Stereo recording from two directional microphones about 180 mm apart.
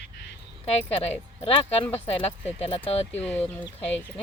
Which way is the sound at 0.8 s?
35° left (ahead or behind).